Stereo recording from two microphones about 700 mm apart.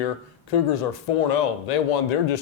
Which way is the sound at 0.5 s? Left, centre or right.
Left.